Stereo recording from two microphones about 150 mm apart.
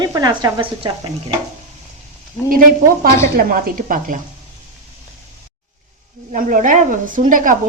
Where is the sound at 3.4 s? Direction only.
75° right (ahead or behind).